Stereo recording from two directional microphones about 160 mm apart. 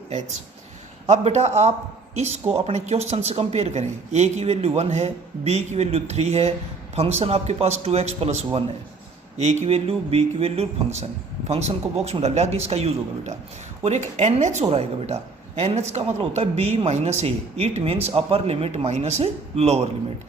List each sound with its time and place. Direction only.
1.0 s speech: 45° right (ahead or behind)